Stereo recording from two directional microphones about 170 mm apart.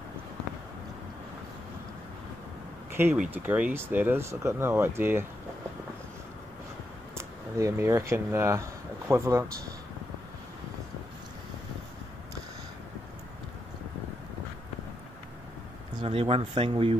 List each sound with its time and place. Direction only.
2.9 s speech: 15° right (ahead or behind)
7.2 s speech: 15° right (ahead or behind)
16.0 s speech: 35° right (ahead or behind)